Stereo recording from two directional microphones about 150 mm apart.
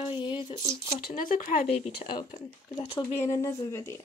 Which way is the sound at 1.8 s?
40° left (ahead or behind).